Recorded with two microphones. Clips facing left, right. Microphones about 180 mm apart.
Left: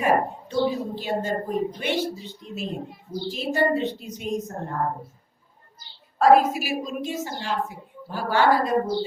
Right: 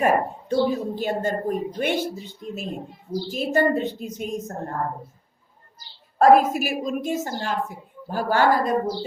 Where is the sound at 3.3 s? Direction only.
45° right (ahead or behind).